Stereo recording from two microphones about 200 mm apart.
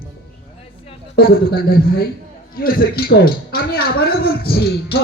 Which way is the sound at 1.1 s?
50° left (ahead or behind).